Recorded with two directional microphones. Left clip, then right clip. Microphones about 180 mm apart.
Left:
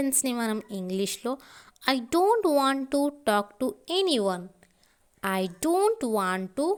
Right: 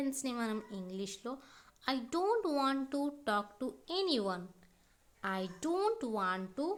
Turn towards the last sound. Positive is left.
turn(degrees=45)  # may be behind; listen again after turning